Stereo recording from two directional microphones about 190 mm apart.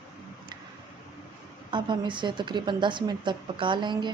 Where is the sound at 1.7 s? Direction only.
25° right (ahead or behind).